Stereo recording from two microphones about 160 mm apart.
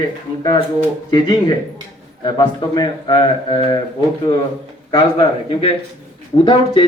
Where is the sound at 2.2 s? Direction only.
25° left (ahead or behind).